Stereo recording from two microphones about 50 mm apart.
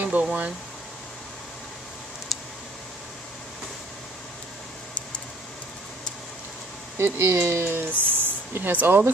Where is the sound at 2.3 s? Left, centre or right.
Centre.